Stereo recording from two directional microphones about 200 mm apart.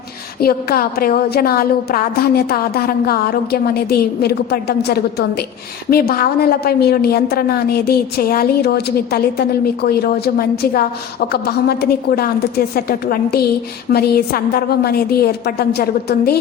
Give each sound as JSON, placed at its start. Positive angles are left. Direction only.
{"t": 0.3, "sound": "a woman's voice", "side_deg": 50}